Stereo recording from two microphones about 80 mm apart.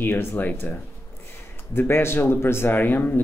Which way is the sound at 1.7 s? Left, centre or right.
Left.